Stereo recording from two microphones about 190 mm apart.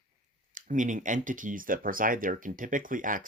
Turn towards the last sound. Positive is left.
turn(degrees=-45)  # may be behind; listen again after turning